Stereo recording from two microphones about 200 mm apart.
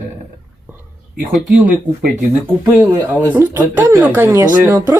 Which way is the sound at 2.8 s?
10° right (ahead or behind).